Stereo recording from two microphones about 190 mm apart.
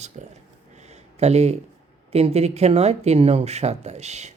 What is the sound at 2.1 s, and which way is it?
Speech, 35° right (ahead or behind).